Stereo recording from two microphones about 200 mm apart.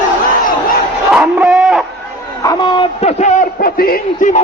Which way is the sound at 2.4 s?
25° left (ahead or behind).